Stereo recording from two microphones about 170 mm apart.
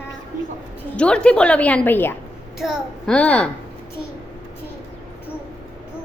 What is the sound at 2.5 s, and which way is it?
Speech, 5° right (ahead or behind).